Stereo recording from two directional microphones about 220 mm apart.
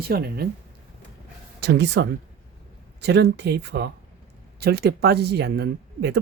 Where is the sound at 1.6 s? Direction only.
50° right (ahead or behind).